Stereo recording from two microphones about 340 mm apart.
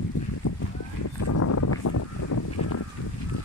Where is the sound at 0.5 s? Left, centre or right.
Left.